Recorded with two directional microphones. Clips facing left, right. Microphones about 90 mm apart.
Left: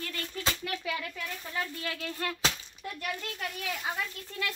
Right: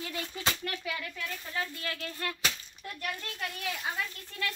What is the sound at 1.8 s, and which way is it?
Music, 25° left (ahead or behind).